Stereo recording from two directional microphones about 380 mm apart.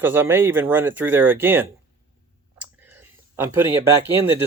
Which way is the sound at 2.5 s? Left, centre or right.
Centre.